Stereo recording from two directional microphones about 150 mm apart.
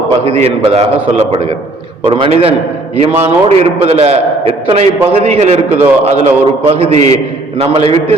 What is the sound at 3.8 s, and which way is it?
A man's voice, 40° right (ahead or behind).